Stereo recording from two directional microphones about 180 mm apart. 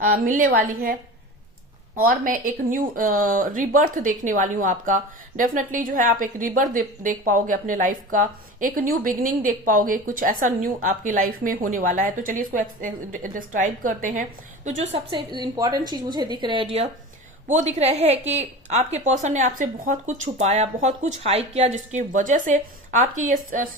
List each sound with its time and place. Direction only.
0.0 s speech: 50° right (ahead or behind)
2.0 s speech: 50° right (ahead or behind)
15.1 s a woman's voice: 25° right (ahead or behind); by 23.6 s 45° right (ahead or behind)